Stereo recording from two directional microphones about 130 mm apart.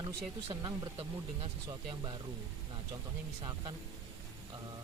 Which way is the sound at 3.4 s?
40° right (ahead or behind).